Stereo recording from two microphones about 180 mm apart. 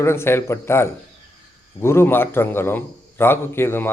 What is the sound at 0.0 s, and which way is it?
A man's voice, 15° left (ahead or behind).